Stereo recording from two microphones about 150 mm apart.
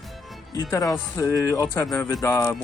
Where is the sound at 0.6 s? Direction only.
20° left (ahead or behind).